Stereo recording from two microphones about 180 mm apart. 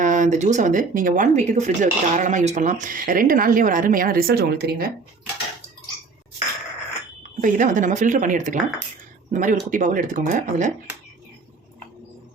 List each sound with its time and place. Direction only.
0.0 s speech: 45° right (ahead or behind); by 4.9 s 60° right (ahead or behind)
7.2 s speech: 45° right (ahead or behind)